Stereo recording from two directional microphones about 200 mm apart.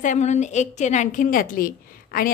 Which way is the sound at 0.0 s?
35° left (ahead or behind).